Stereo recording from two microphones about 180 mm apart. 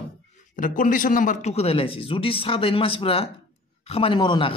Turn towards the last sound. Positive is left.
turn(degrees=25)  # may be behind; listen again after turning